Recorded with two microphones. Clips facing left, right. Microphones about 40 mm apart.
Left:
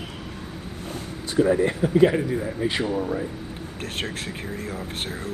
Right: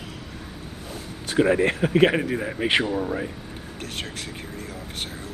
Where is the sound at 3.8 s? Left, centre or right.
Left.